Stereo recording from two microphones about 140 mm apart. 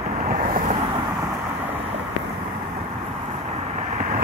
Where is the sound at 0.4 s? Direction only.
70° right (ahead or behind).